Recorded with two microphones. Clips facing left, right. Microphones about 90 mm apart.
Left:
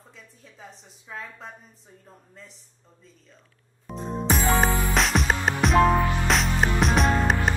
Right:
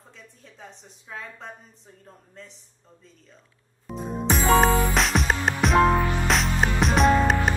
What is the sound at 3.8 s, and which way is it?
Music, 5° right (ahead or behind).